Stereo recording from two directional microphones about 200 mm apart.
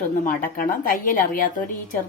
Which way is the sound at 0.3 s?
40° left (ahead or behind).